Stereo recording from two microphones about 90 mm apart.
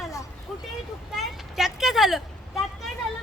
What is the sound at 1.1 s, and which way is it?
Vehicle, 5° right (ahead or behind).